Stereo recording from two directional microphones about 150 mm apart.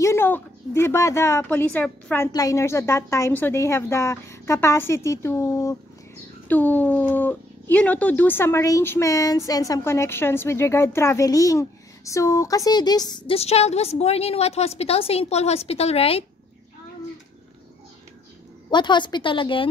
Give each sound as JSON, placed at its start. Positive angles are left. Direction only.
{"t": 0.0, "sound": "a woman's voice", "side_deg": 15}
{"t": 13.3, "sound": "a woman's voice", "side_deg": 45}
{"t": 18.7, "sound": "a woman's voice", "side_deg": 30}